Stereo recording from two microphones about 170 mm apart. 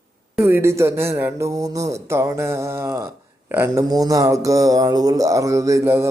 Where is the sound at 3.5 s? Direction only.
15° right (ahead or behind).